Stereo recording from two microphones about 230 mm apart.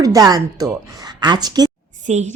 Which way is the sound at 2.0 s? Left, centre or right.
Right.